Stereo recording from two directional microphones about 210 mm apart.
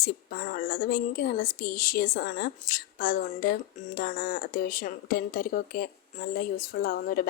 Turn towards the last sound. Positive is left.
turn(degrees=40)  # may be behind; listen again after turning